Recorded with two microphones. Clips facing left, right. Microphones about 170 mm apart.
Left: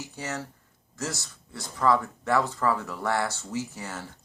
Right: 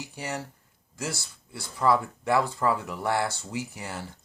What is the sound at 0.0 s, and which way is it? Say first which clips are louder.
Speech: even; 15° right (ahead or behind).